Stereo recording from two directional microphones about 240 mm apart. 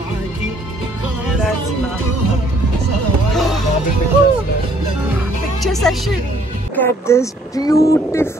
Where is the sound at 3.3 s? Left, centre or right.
Centre.